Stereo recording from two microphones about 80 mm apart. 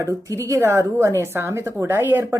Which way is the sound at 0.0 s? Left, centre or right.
Right.